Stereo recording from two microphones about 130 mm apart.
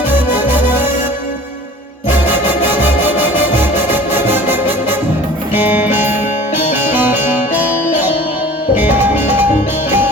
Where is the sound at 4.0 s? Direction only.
15° right (ahead or behind).